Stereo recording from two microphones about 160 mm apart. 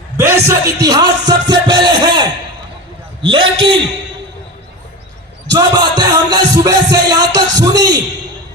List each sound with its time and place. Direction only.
0.2 s music: 15° right (ahead or behind)
3.2 s a man's voice: 30° right (ahead or behind)
5.5 s music: 25° right (ahead or behind)